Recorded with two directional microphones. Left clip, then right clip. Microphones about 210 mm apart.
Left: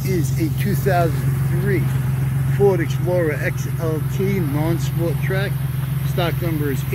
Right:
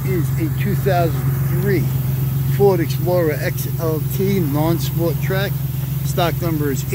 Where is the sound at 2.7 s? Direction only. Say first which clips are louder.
Right 2 dB; 10° right (ahead or behind).